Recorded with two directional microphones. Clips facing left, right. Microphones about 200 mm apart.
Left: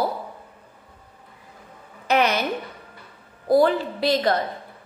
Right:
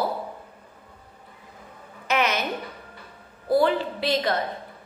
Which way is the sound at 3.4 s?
40° left (ahead or behind).